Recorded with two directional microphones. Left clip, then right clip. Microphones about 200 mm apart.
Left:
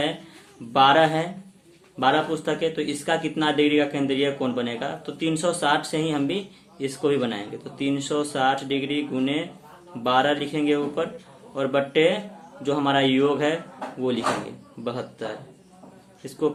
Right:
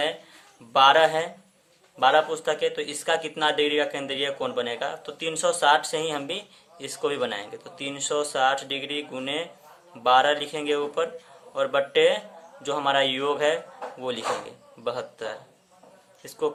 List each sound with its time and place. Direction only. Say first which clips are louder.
0.7 s speech: even; 30° right (ahead or behind)